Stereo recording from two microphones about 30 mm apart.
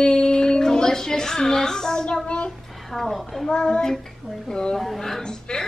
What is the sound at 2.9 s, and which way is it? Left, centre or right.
Speech, centre.